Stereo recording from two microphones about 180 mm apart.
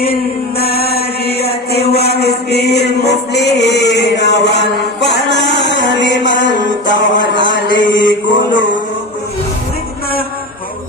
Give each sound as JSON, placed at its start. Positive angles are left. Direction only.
{"t": 0.6, "sound": "chant", "side_deg": 60}
{"t": 1.9, "sound": "music", "side_deg": 65}
{"t": 7.3, "sound": "mantra", "side_deg": 85}